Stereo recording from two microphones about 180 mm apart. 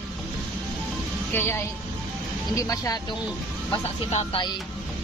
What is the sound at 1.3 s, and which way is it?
Speech, 10° left (ahead or behind).